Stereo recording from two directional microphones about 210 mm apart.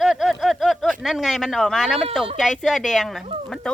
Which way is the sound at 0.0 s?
Centre (ahead or behind).